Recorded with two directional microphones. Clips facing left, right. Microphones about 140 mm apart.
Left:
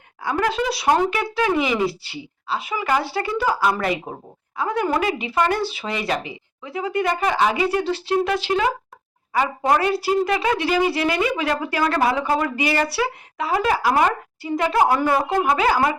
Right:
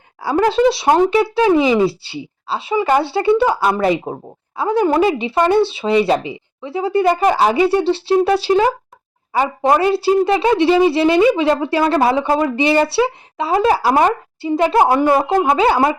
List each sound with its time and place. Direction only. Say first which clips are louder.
0.2 s speech: right 8 dB; 30° right (ahead or behind)